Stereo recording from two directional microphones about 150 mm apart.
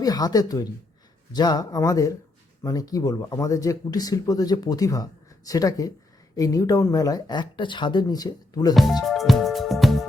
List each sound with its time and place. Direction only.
0.0 s speech: 25° left (ahead or behind)
8.7 s speech: centre (ahead or behind)
9.0 s music: centre (ahead or behind)